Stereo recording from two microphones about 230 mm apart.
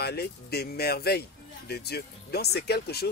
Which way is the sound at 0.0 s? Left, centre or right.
Left.